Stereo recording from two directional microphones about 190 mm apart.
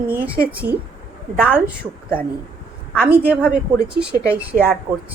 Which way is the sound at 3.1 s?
10° right (ahead or behind).